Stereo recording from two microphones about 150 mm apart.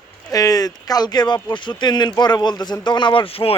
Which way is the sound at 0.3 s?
25° left (ahead or behind).